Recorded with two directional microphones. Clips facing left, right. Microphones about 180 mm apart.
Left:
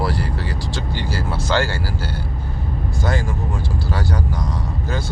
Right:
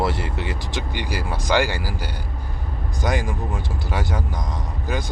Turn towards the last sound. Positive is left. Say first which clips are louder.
# left 1 dB
turn(degrees=-15)  # may be behind; listen again after turning